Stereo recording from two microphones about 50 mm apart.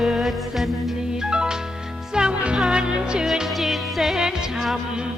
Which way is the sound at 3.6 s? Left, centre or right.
Centre.